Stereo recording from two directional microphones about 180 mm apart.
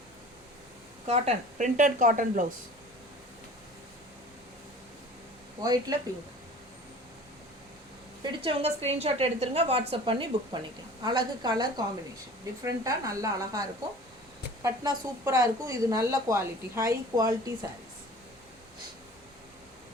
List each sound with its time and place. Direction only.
1.0 s a woman's voice: 40° right (ahead or behind)
5.9 s a woman's voice: 20° right (ahead or behind)
8.2 s a woman's voice: 30° right (ahead or behind)